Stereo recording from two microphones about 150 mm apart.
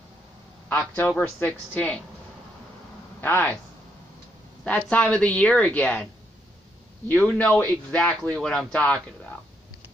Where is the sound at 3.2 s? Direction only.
10° left (ahead or behind).